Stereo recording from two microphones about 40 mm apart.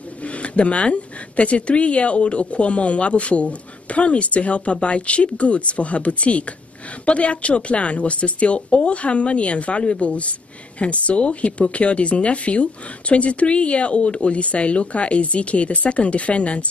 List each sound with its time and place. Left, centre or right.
0.2 s speech: left